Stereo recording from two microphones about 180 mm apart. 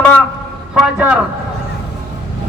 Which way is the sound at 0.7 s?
5° right (ahead or behind).